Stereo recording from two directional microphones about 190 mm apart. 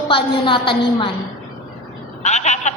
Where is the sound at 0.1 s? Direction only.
25° left (ahead or behind).